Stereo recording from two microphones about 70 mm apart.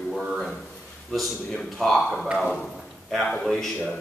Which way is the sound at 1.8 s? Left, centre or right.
Centre.